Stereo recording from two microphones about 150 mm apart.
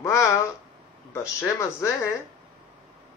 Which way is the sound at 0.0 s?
20° left (ahead or behind).